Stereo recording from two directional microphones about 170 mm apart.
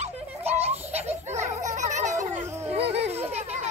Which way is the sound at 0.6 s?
40° right (ahead or behind).